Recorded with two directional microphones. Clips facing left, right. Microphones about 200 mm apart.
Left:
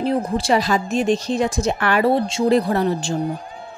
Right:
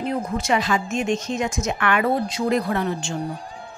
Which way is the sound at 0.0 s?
30° left (ahead or behind).